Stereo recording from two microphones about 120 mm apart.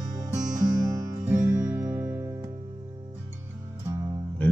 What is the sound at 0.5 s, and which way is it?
Music, 35° right (ahead or behind).